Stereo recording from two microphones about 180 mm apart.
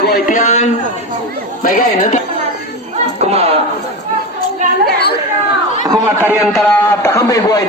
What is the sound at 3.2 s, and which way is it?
Speech, 35° right (ahead or behind).